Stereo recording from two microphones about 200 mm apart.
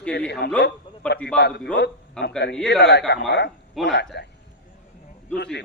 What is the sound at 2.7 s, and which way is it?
Speech, 55° left (ahead or behind).